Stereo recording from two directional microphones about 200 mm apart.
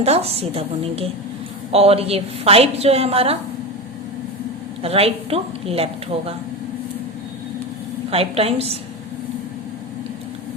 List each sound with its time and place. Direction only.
0.0 s a woman's voice: 30° right (ahead or behind)
4.8 s a woman's voice: 30° right (ahead or behind)
8.1 s a woman's voice: 30° right (ahead or behind)